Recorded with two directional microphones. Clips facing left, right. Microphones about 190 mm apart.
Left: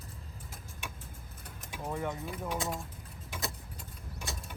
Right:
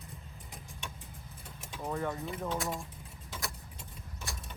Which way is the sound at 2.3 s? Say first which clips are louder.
Right 1 dB; centre (ahead or behind).